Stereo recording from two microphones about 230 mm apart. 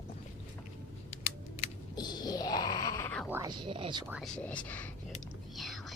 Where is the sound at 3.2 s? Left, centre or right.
Centre.